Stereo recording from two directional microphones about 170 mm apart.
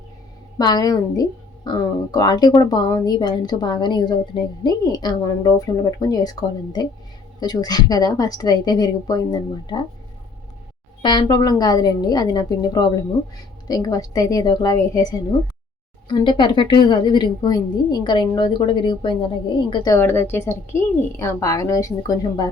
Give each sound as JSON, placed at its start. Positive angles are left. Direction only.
{"t": 0.6, "sound": "a woman's voice", "side_deg": 25}
{"t": 7.3, "sound": "a woman's voice", "side_deg": 25}
{"t": 11.0, "sound": "a woman's voice", "side_deg": 25}